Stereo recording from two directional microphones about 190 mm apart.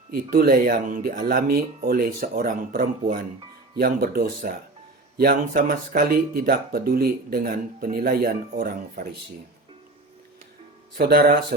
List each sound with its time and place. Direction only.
0.1 s speech: 50° right (ahead or behind)
10.9 s speech: 55° right (ahead or behind)